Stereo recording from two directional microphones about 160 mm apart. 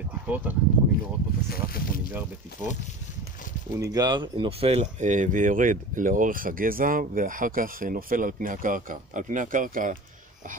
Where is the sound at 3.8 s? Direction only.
25° right (ahead or behind).